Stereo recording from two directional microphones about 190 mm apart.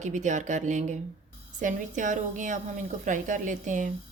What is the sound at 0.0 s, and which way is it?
A woman's voice, 40° right (ahead or behind).